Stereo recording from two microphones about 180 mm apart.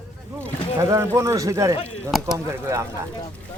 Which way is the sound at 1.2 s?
15° right (ahead or behind).